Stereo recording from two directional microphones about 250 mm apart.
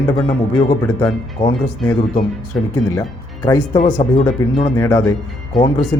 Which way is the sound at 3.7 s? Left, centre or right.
Left.